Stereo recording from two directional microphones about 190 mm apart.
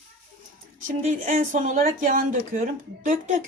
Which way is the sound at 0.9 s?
45° right (ahead or behind).